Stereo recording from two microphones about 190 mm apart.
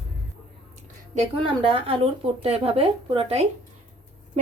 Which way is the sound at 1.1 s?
25° right (ahead or behind).